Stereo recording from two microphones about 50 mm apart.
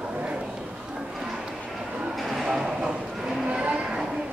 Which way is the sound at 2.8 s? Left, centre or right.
Centre.